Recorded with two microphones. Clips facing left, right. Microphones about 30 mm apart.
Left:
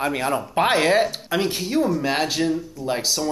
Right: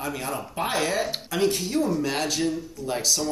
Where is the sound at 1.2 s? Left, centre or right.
Left.